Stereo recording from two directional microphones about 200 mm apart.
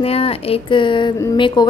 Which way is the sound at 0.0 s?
30° left (ahead or behind).